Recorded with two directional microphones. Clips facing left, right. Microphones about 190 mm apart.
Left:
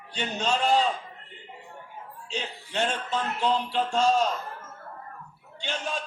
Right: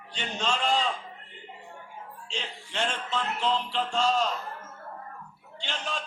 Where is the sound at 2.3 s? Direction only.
40° left (ahead or behind).